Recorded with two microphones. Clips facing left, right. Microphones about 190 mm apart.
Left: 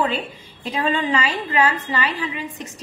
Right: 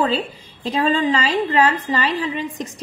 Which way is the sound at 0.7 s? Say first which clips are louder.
Right 3 dB; 35° right (ahead or behind).